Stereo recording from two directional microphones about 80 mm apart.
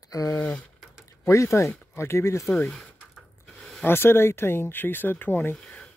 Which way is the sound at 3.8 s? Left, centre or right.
Left.